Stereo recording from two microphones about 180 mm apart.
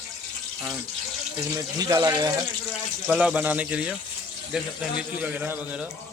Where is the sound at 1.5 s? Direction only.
20° right (ahead or behind).